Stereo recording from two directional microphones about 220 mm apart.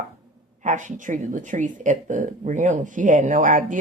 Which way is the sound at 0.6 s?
35° right (ahead or behind).